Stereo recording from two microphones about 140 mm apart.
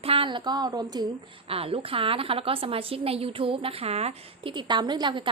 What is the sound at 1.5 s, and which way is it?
A woman's voice, 45° right (ahead or behind).